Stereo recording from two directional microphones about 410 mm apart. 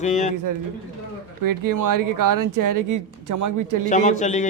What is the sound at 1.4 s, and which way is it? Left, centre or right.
Speech, right.